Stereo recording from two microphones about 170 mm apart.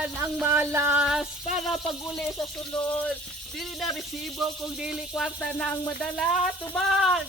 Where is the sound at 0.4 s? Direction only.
15° right (ahead or behind).